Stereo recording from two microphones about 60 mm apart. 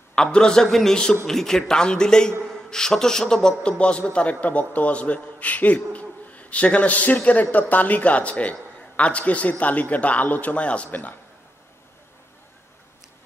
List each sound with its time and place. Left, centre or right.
0.1 s a man's voice: centre